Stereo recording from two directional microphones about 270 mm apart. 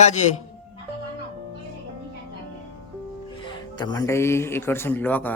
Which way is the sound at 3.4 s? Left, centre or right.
Centre.